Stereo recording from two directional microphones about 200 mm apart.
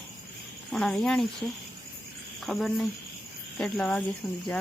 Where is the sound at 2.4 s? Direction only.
Centre (ahead or behind).